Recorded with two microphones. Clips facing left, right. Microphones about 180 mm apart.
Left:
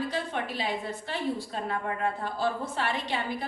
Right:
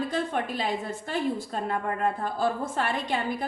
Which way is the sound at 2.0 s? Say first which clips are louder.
Right 4 dB; 50° right (ahead or behind).